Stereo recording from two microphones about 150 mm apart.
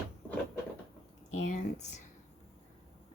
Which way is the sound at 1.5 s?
50° left (ahead or behind).